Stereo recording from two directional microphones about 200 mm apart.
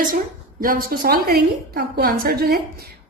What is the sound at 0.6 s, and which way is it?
A woman's voice, 45° right (ahead or behind).